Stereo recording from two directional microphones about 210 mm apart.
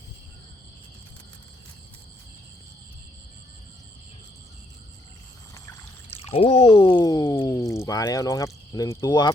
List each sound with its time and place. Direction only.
6.3 s speech: 25° left (ahead or behind)